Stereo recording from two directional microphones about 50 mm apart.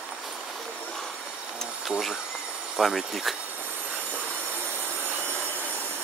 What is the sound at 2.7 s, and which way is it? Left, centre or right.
Speech, centre.